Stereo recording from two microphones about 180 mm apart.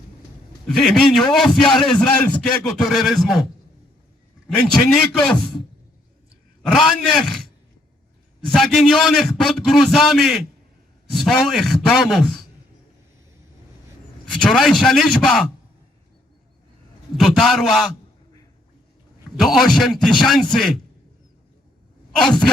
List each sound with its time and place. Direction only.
0.7 s a man's voice: centre (ahead or behind)
4.7 s a man's voice: 5° left (ahead or behind)
6.6 s a man's voice: centre (ahead or behind)
8.5 s a man's voice: centre (ahead or behind)
14.3 s a man's voice: 5° left (ahead or behind)
17.2 s a man's voice: centre (ahead or behind)
19.4 s a man's voice: centre (ahead or behind)
22.1 s speech: 5° left (ahead or behind)